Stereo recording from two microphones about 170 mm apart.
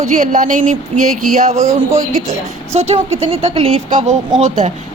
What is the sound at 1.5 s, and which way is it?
Speech, 20° right (ahead or behind).